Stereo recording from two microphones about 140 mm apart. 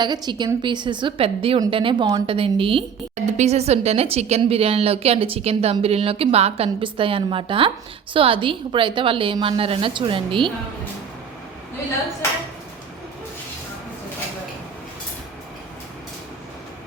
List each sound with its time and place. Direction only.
0.0 s a woman's voice: 30° right (ahead or behind)
3.2 s a woman's voice: 50° right (ahead or behind)